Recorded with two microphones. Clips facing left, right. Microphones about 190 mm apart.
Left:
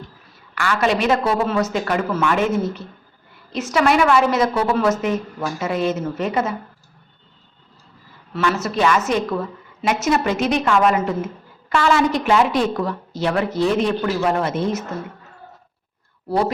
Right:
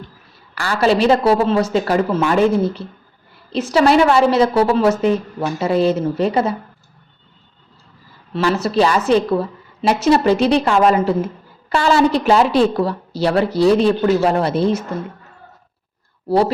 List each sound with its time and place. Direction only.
0.5 s speech: 35° right (ahead or behind)
8.3 s speech: 35° right (ahead or behind)